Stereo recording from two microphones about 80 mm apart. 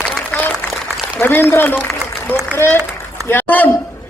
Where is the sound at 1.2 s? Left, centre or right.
Left.